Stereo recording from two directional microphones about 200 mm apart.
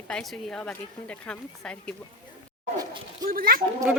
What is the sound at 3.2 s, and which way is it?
Speech, 45° right (ahead or behind).